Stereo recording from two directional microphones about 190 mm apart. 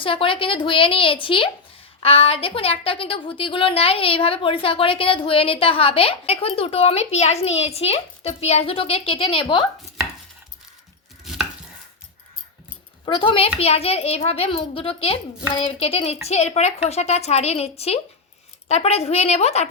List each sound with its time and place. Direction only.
0.0 s a woman's voice: 30° left (ahead or behind)
13.1 s a woman's voice: 30° left (ahead or behind)